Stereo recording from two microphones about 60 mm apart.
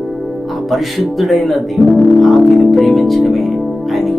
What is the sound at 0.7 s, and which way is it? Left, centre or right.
A man's voice, centre.